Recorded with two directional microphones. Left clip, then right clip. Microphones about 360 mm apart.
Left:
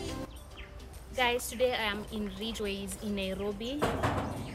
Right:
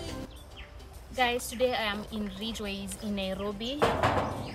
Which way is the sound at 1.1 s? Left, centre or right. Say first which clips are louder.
Right 1 dB; centre.